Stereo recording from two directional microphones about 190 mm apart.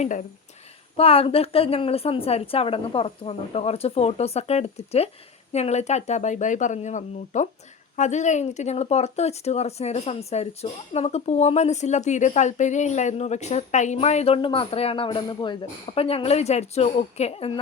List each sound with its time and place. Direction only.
0.0 s speech: 40° left (ahead or behind)
0.9 s speech: 30° left (ahead or behind)